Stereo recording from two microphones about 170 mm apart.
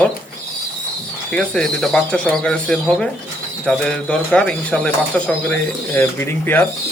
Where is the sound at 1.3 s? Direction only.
5° left (ahead or behind).